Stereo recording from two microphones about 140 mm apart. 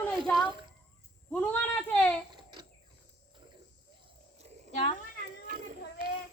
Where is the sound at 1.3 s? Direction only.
10° left (ahead or behind).